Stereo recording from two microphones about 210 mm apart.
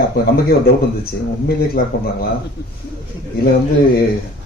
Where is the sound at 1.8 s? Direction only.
40° left (ahead or behind).